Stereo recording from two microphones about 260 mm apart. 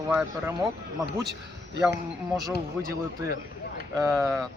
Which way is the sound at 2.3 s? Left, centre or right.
Centre.